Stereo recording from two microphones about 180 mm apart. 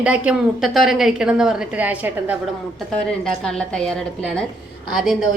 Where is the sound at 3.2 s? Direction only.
5° left (ahead or behind).